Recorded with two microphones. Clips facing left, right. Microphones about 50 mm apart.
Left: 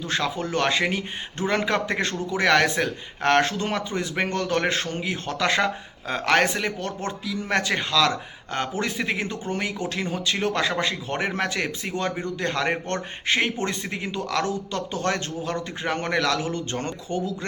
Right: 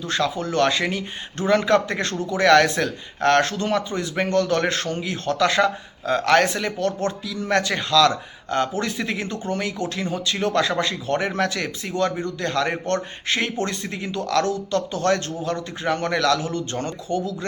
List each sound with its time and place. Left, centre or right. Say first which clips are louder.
0.0 s speech: right 2 dB; left